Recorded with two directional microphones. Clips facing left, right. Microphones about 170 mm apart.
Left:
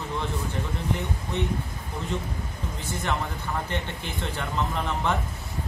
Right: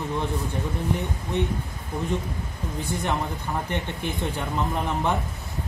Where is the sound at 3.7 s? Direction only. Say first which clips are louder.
Right 3 dB; 15° right (ahead or behind).